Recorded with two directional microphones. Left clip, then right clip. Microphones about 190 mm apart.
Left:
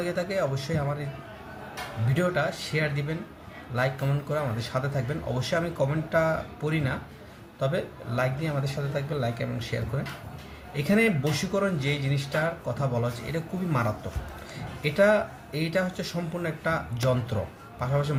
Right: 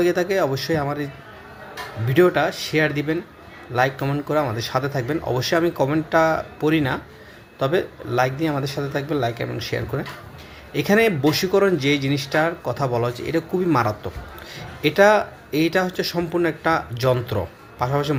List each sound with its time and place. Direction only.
0.0 s speech: 40° right (ahead or behind)
2.1 s speech: 40° right (ahead or behind)